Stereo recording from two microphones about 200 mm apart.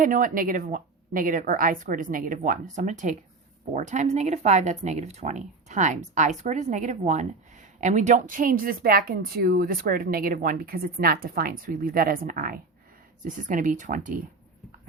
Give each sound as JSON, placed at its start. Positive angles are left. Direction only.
{"t": 0.0, "sound": "a woman's voice", "side_deg": -40}